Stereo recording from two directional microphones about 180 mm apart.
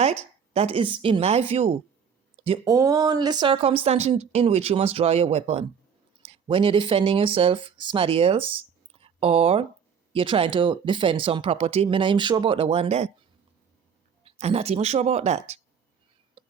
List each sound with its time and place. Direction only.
0.0 s speech: 35° right (ahead or behind)
2.6 s a woman's voice: 20° right (ahead or behind); by 13.1 s 35° right (ahead or behind)
14.3 s a woman's voice: 35° right (ahead or behind)
16.4 s whispering: 30° right (ahead or behind)